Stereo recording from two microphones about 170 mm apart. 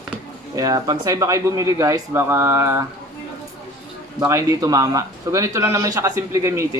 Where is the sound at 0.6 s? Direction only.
20° right (ahead or behind).